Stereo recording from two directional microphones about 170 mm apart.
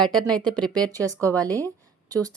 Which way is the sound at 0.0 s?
5° left (ahead or behind).